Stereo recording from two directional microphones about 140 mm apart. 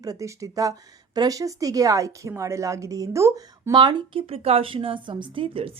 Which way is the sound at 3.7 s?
35° right (ahead or behind).